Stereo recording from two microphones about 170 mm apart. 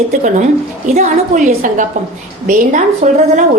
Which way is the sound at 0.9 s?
45° right (ahead or behind).